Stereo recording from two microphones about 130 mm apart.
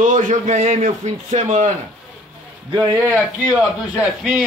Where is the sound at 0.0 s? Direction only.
80° right.